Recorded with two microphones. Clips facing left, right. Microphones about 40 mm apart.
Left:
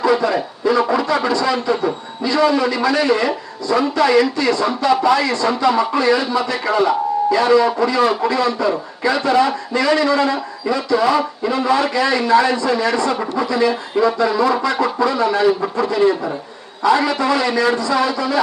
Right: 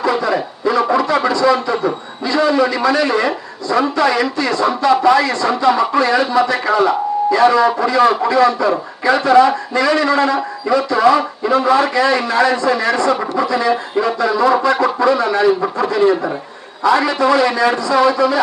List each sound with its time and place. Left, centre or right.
0.0 s a sound: right
2.5 s a man's voice: right
8.0 s a man's voice: right
8.4 s a man's voice: right